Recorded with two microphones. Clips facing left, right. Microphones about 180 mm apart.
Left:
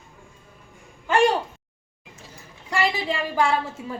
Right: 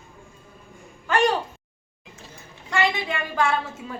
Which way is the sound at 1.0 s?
25° left (ahead or behind).